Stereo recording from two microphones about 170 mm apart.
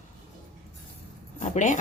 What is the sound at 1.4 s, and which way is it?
Keys jangling, 45° left (ahead or behind).